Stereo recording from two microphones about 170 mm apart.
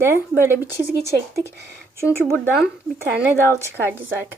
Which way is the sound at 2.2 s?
10° left (ahead or behind).